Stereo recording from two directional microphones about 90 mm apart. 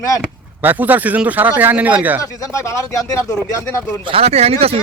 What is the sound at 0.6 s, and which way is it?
Speech, 20° right (ahead or behind).